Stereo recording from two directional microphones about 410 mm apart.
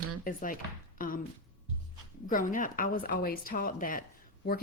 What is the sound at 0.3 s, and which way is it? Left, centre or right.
Speech, centre.